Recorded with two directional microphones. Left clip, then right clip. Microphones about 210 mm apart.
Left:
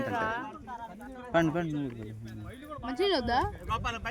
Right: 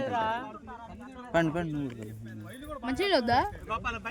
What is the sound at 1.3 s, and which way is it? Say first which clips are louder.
A man's voice: even; 5° left (ahead or behind).